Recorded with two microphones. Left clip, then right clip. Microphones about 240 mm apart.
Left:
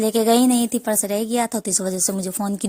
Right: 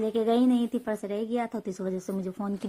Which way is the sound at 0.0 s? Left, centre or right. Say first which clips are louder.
Left 8 dB; left.